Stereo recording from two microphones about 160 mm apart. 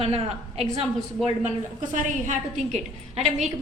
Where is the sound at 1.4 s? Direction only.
50° right (ahead or behind).